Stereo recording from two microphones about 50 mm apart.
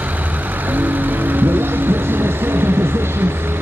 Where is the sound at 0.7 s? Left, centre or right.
Right.